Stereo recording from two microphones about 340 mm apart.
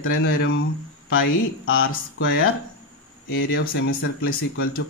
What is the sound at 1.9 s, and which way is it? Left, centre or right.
Speech, left.